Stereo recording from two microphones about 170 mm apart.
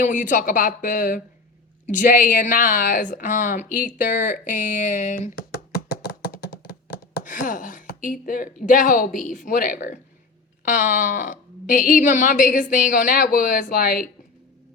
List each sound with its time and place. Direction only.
0.0 s speech: 50° left (ahead or behind)
7.3 s speech: 50° left (ahead or behind)